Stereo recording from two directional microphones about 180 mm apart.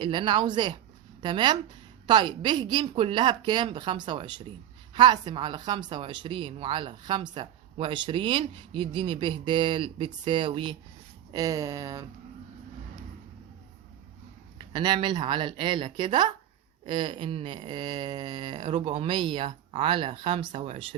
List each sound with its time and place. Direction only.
0.0 s a woman's voice: 25° right (ahead or behind)
14.7 s a woman's voice: 25° right (ahead or behind)